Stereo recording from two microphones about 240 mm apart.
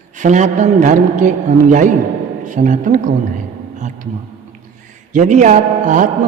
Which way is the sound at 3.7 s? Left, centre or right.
Right.